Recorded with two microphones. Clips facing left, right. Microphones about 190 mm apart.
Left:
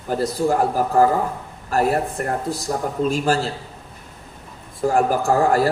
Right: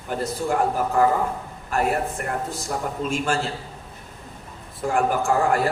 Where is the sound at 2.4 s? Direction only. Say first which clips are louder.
Left 4 dB; 35° left (ahead or behind).